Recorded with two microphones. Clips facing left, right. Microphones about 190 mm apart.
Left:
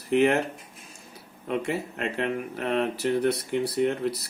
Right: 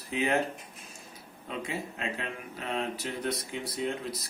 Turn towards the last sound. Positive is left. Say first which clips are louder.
# left 8 dB
turn(degrees=70)  # may be behind; listen again after turning